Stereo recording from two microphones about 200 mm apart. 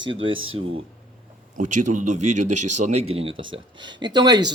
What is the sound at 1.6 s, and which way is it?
A man's voice, 40° right (ahead or behind).